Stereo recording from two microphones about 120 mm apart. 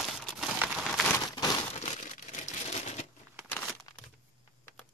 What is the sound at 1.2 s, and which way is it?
Crumpling, 35° left (ahead or behind).